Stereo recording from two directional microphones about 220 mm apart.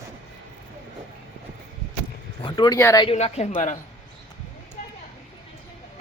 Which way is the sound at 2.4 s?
20° left (ahead or behind).